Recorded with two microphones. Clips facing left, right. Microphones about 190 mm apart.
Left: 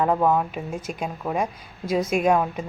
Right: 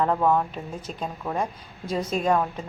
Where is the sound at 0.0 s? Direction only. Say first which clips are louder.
Left 1 dB; 10° left (ahead or behind).